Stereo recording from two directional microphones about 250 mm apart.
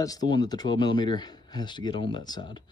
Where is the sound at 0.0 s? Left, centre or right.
Centre.